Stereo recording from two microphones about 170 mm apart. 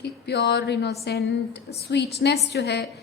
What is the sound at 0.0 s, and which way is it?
A woman's voice, 75° left (ahead or behind).